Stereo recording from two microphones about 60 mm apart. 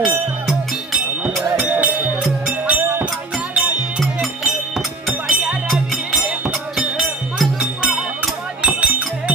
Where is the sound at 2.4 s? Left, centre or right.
Right.